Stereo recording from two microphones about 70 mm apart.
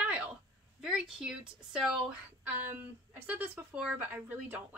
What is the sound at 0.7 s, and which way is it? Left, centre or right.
A woman's voice, centre.